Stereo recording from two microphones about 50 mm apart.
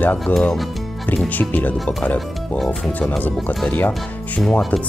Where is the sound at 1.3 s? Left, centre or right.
Left.